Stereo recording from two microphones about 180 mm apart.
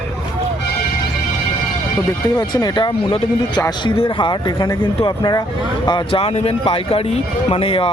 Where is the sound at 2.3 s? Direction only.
25° left (ahead or behind).